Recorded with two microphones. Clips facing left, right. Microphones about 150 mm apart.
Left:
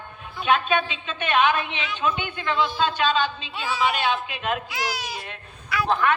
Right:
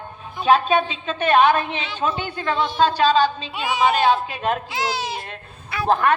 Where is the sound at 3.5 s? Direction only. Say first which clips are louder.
Right 4 dB; 15° right (ahead or behind).